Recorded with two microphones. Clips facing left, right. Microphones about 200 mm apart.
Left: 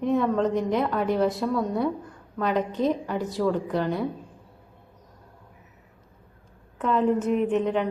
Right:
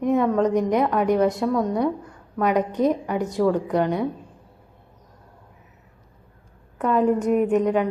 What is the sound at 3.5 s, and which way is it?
Speech, centre (ahead or behind).